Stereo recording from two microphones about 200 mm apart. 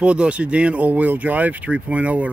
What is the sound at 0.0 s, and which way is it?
Speech, 5° right (ahead or behind).